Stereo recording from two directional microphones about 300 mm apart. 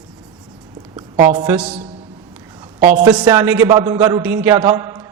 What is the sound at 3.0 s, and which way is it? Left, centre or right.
A man's voice, centre.